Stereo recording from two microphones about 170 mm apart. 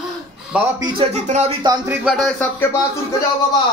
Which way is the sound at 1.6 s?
20° right (ahead or behind).